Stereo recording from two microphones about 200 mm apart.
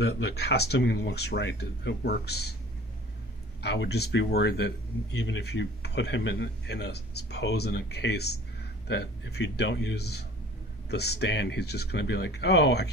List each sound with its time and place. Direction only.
0.0 s speech: 55° left (ahead or behind)
3.6 s speech: 60° left (ahead or behind)